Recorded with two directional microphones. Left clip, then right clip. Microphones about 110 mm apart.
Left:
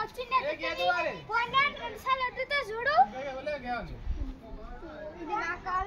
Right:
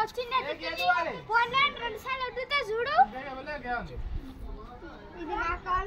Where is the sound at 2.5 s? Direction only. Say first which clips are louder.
Right 2 dB; 25° left (ahead or behind).